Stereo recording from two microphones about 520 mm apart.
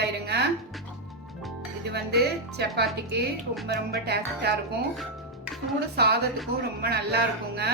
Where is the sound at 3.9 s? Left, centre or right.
Centre.